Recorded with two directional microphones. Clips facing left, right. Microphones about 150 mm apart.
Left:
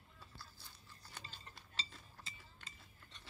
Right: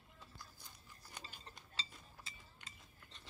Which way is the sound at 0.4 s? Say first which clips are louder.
Even; 15° right (ahead or behind).